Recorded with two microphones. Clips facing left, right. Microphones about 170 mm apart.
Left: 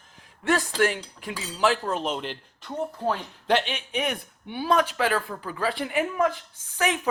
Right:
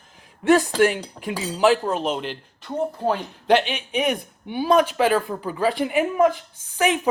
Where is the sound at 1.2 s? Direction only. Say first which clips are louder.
Right 6 dB; 50° right (ahead or behind).